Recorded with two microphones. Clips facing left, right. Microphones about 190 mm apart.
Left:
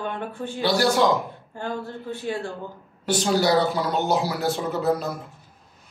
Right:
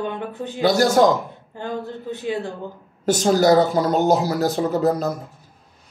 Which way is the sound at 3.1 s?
45° right (ahead or behind).